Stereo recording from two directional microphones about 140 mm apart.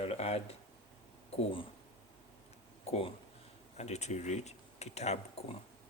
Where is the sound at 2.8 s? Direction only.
45° left (ahead or behind).